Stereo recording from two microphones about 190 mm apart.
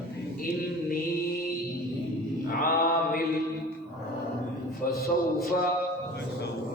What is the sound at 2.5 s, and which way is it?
Mantra, 50° left (ahead or behind).